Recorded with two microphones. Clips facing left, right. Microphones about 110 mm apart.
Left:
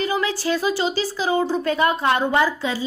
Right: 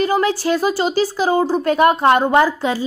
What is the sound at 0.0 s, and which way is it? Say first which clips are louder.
A woman's voice: right 6 dB; 50° right (ahead or behind).